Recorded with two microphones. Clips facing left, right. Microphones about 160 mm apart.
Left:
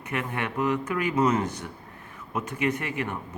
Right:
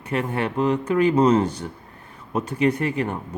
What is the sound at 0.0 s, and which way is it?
Speech, 30° right (ahead or behind).